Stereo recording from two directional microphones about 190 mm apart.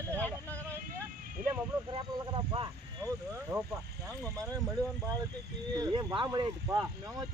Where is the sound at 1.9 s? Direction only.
25° right (ahead or behind).